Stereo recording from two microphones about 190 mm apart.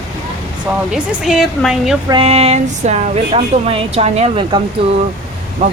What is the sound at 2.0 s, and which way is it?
Speech, 30° right (ahead or behind).